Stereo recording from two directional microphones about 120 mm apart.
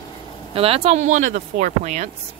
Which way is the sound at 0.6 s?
55° right (ahead or behind).